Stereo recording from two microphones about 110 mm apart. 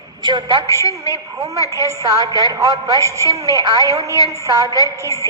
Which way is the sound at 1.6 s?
30° right (ahead or behind).